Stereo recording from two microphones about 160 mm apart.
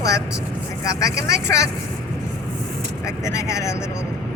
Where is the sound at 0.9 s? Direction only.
20° left (ahead or behind).